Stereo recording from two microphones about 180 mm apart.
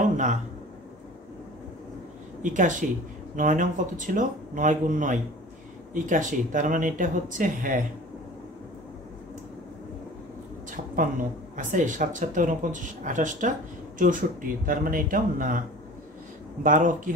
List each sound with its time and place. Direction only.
2.4 s speech: 45° right (ahead or behind)
10.7 s speech: 45° right (ahead or behind)
16.6 s speech: 45° right (ahead or behind)